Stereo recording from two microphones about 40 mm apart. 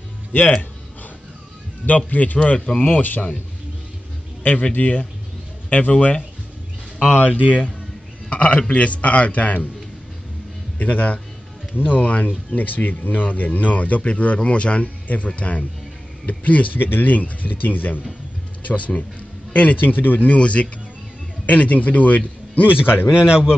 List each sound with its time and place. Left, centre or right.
0.3 s speech: left
2.0 s speech: left
2.3 s speech: left
2.8 s speech: left
4.4 s speech: left
7.2 s speech: left
10.8 s speech: left
16.7 s speech: left
18.7 s speech: left
20.3 s speech: left
23.1 s a man's voice: right